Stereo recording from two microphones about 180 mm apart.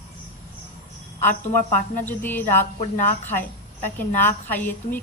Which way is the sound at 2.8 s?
40° left (ahead or behind).